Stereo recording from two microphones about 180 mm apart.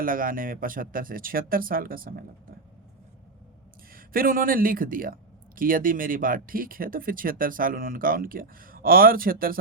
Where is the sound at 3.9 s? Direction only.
50° right (ahead or behind).